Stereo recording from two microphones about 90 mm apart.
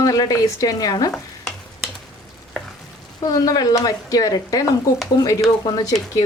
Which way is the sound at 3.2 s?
45° left (ahead or behind).